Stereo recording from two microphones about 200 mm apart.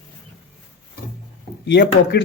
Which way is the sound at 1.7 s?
55° left (ahead or behind).